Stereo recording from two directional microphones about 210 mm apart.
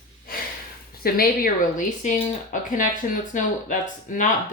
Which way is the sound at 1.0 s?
45° left (ahead or behind).